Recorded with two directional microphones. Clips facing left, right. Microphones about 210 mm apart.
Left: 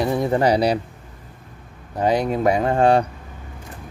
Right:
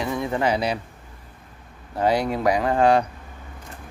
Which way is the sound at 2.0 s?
20° left (ahead or behind).